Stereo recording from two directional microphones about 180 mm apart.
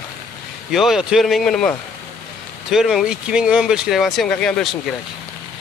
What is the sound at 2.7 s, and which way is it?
Speech, centre (ahead or behind).